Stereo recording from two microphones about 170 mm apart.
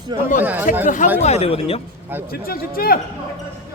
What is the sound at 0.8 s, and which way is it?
Speech, 45° left (ahead or behind).